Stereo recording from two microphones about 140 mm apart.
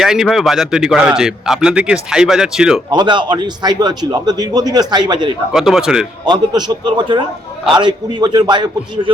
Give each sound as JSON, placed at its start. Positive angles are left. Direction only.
{"t": 0.0, "sound": "a man's voice", "side_deg": -5}
{"t": 2.9, "sound": "a man's voice", "side_deg": -35}
{"t": 5.5, "sound": "a man's voice", "side_deg": 0}
{"t": 6.2, "sound": "a man's voice", "side_deg": -30}